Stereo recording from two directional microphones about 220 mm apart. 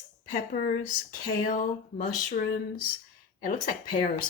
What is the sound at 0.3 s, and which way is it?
Speech, 35° left (ahead or behind).